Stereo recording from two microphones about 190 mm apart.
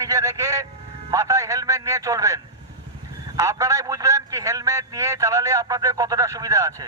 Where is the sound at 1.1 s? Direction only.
15° right (ahead or behind).